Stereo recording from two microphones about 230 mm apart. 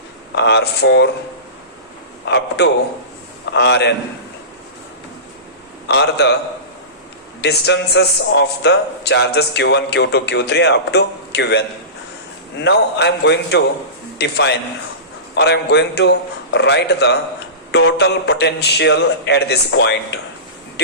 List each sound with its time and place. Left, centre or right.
0.3 s a man's voice: left
2.2 s a man's voice: left
5.9 s a man's voice: left
7.4 s a man's voice: left